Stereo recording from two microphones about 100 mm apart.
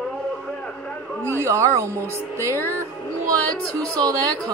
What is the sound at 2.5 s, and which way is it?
Music, 20° left (ahead or behind).